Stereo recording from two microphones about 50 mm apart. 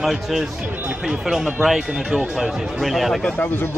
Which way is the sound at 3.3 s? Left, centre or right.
Left.